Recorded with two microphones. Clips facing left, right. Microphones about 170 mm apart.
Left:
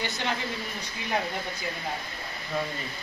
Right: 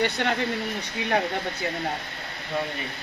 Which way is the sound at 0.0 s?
60° right (ahead or behind).